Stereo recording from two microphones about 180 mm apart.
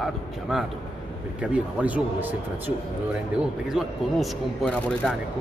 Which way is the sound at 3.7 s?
Centre (ahead or behind).